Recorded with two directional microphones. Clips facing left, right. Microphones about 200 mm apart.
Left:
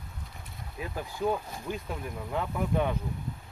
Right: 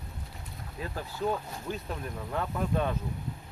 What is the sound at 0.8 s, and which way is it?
Speech, 15° left (ahead or behind).